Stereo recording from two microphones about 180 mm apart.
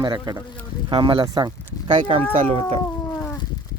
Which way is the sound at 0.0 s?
20° right (ahead or behind).